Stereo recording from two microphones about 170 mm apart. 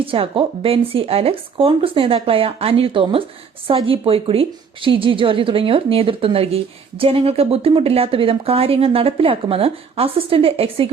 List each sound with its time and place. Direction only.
0.0 s speech: 35° right (ahead or behind)